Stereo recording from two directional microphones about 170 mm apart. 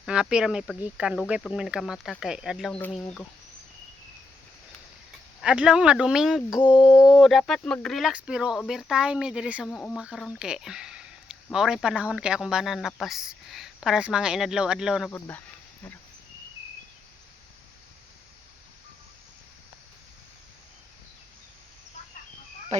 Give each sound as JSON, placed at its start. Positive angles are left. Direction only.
{"t": 0.0, "sound": "speech", "side_deg": -5}
{"t": 5.4, "sound": "speech", "side_deg": -5}
{"t": 6.6, "sound": "a sound", "side_deg": 30}
{"t": 7.1, "sound": "speech", "side_deg": 0}
{"t": 22.7, "sound": "speech", "side_deg": -40}